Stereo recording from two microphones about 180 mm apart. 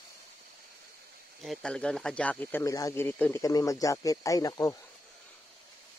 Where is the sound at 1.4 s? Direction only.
Centre (ahead or behind); by 4.7 s 20° left (ahead or behind).